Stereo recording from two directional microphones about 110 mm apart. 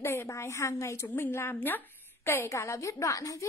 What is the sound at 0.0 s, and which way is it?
A woman's voice, 25° left (ahead or behind).